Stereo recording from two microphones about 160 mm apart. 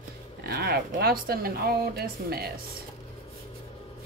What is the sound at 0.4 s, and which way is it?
Speech, 75° right (ahead or behind).